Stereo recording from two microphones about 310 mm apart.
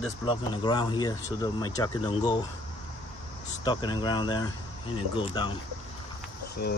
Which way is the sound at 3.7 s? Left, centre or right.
Centre.